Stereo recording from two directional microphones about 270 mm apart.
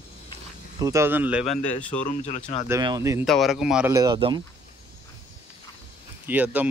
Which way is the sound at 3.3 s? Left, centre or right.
Centre.